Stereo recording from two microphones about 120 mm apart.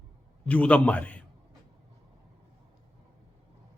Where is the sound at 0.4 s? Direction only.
10° left (ahead or behind).